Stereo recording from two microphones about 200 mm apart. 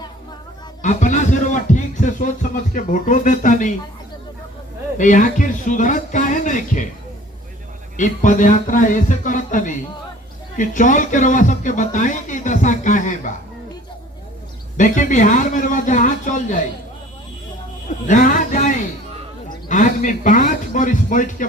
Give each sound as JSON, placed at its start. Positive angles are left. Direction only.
{"t": 0.8, "sound": "speech", "side_deg": 40}
{"t": 4.9, "sound": "speech", "side_deg": 40}
{"t": 7.9, "sound": "speech", "side_deg": 40}
{"t": 14.8, "sound": "speech", "side_deg": 40}
{"t": 18.1, "sound": "speech", "side_deg": 40}